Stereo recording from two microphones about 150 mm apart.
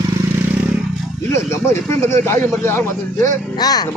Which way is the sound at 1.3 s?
20° left (ahead or behind).